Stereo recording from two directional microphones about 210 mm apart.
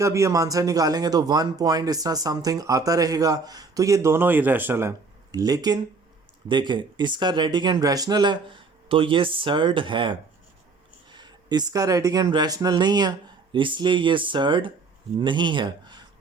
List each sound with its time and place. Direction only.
0.0 s speech: 15° right (ahead or behind)